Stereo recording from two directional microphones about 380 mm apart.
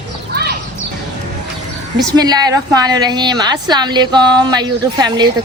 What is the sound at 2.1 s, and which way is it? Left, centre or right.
Speech, centre.